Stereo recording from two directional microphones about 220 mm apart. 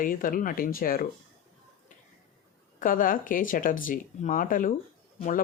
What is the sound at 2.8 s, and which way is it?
Speech, 40° left (ahead or behind).